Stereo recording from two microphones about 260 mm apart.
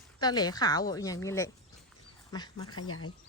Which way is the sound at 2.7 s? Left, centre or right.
Left.